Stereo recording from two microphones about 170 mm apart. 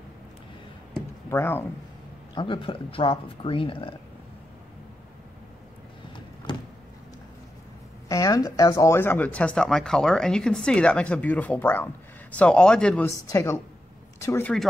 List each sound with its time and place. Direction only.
1.3 s speech: 15° left (ahead or behind)
2.3 s speech: 30° left (ahead or behind)
6.5 s a sound: 25° left (ahead or behind)
8.1 s speech: 20° left (ahead or behind); by 13.1 s 5° left (ahead or behind)
13.3 s a woman's voice: 20° left (ahead or behind)